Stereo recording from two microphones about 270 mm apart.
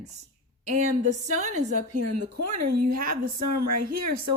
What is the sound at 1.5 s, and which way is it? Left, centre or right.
A woman's voice, right.